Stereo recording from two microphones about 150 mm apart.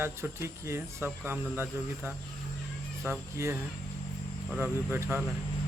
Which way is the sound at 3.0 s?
15° right (ahead or behind).